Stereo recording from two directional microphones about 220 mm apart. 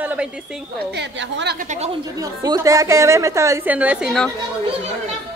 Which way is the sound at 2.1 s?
15° right (ahead or behind).